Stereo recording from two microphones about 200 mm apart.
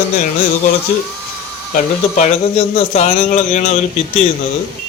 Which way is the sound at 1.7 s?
35° left (ahead or behind).